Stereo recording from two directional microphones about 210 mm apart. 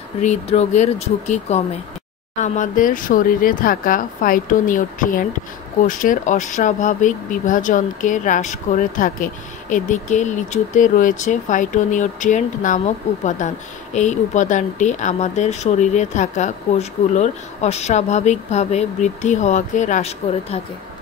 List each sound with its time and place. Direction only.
0.2 s speech: 30° left (ahead or behind)